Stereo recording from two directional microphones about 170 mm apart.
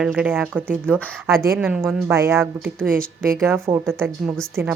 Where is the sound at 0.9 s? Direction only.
5° left (ahead or behind).